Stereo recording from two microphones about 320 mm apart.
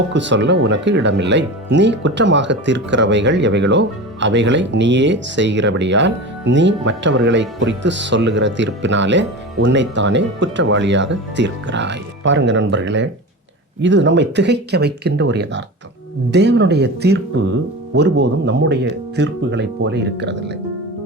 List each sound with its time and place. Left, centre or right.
0.1 s speech: right